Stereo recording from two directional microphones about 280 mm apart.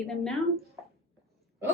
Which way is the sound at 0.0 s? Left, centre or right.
Centre.